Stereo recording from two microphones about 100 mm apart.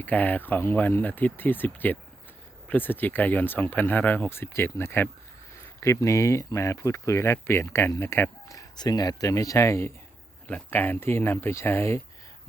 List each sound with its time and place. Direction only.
0.0 s speech: 15° left (ahead or behind)